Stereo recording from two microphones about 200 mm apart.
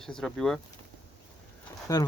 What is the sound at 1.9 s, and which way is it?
Speech, 20° left (ahead or behind).